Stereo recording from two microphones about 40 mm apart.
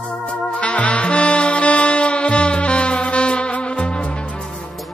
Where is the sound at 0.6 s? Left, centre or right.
Left.